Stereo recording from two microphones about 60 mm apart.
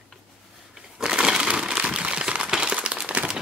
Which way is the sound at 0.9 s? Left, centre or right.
Centre.